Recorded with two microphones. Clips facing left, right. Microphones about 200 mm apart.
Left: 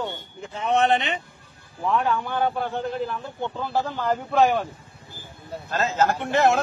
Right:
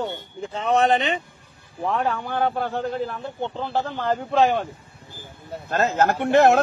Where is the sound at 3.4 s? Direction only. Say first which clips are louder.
Right 1 dB; 25° right (ahead or behind).